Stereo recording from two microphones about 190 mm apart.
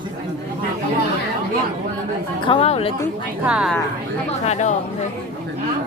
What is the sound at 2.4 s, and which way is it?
Speech, 30° left (ahead or behind).